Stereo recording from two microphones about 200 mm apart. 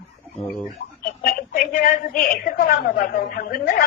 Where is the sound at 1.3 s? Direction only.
45° left (ahead or behind).